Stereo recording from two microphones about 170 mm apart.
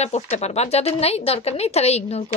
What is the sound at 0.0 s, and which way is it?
A woman's voice, 40° left (ahead or behind).